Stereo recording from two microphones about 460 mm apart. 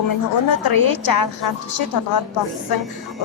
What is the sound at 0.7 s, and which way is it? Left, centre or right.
A woman's voice, left.